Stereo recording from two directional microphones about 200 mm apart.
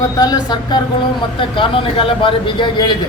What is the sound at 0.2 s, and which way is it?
A man's voice, 20° left (ahead or behind).